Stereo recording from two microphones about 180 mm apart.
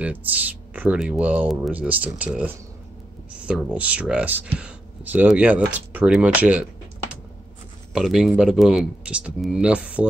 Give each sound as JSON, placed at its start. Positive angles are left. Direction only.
{"t": 0.0, "sound": "speech", "side_deg": -10}
{"t": 7.9, "sound": "speech", "side_deg": 0}